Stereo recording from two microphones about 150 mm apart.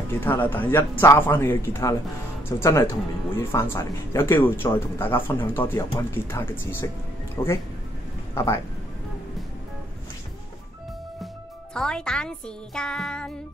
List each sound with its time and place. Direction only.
0.2 s speech: 15° left (ahead or behind)
11.7 s music: 5° left (ahead or behind)